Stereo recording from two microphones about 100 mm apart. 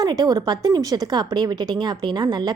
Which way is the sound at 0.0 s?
40° right (ahead or behind).